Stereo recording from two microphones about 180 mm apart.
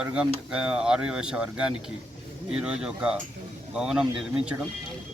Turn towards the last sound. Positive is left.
turn(degrees=-5)  # may be behind; listen again after turning